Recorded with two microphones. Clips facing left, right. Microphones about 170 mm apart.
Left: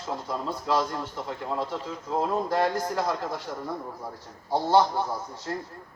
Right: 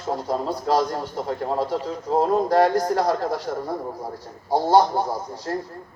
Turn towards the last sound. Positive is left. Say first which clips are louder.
# right 5 dB
turn(degrees=-40)  # may be behind; listen again after turning